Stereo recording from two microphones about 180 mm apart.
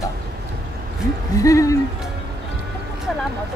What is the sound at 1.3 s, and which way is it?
Music, 20° left (ahead or behind).